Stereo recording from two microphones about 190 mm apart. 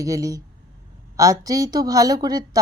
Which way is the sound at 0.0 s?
15° right (ahead or behind).